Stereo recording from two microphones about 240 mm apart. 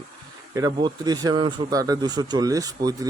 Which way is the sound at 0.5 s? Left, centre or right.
Centre.